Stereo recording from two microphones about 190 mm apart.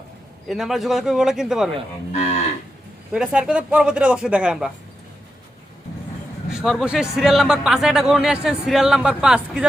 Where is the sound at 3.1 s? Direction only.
5° right (ahead or behind).